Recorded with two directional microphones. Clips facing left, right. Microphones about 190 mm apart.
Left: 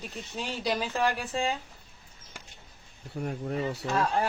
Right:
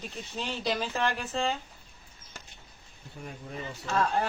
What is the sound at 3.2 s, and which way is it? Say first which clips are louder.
Speech: left 8 dB; 65° left (ahead or behind).